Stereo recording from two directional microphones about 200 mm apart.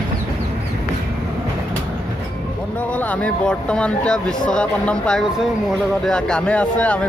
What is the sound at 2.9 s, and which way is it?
Speech, 5° left (ahead or behind).